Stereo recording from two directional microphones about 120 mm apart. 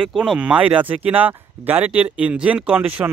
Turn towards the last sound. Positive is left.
turn(degrees=-10)  # may be behind; listen again after turning